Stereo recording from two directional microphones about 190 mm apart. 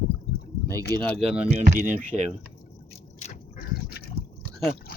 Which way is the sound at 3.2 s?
50° left (ahead or behind).